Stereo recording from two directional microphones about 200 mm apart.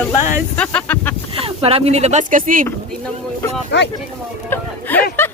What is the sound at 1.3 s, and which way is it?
Speech, 30° right (ahead or behind).